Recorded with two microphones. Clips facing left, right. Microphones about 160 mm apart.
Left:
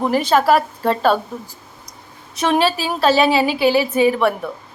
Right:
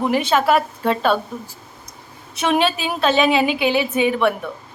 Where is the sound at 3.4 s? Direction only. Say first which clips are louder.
Left 3 dB; 35° left (ahead or behind).